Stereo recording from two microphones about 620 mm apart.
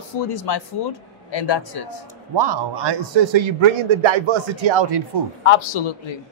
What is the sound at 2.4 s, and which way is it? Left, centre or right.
Speech, right.